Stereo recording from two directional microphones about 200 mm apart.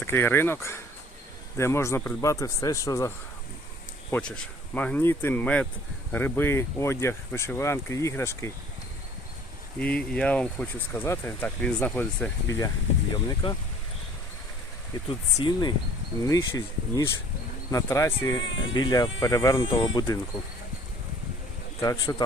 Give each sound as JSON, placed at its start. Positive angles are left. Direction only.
{"t": 0.0, "sound": "speech", "side_deg": 10}
{"t": 4.1, "sound": "speech", "side_deg": 5}
{"t": 9.8, "sound": "speech", "side_deg": 5}
{"t": 15.4, "sound": "speech", "side_deg": 20}
{"t": 21.8, "sound": "speech", "side_deg": 15}